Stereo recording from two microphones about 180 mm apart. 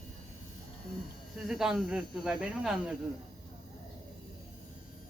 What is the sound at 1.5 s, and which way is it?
Speech, centre (ahead or behind).